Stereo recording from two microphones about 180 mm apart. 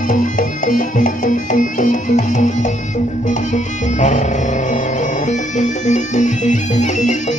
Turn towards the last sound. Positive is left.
turn(degrees=40)  # may be behind; listen again after turning